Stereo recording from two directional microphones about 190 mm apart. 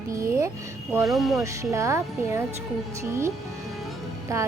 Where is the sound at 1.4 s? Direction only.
15° right (ahead or behind).